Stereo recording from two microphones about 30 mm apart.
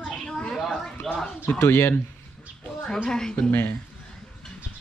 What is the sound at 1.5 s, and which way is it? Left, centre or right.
Speech, left.